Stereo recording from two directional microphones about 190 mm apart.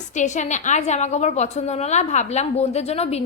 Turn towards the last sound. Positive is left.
turn(degrees=35)  # may be behind; listen again after turning